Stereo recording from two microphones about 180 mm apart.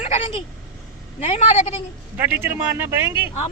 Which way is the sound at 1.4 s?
40° left (ahead or behind).